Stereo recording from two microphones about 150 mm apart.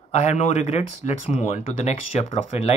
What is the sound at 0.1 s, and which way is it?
Speech, 50° left (ahead or behind).